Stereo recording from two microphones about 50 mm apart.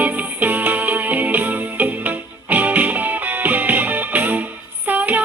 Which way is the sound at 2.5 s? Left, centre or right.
Right.